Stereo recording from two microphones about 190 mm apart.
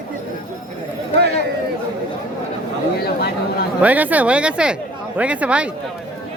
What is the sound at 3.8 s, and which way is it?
Speech, 10° right (ahead or behind).